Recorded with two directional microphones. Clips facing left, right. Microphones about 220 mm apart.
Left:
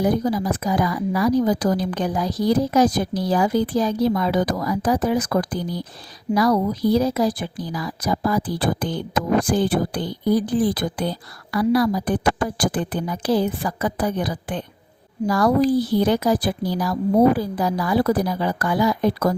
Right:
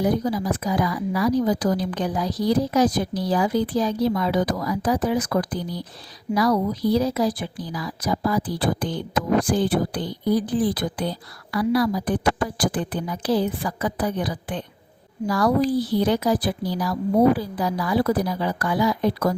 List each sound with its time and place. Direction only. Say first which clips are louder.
0.0 s a woman's voice: left 2 dB; 45° left (ahead or behind)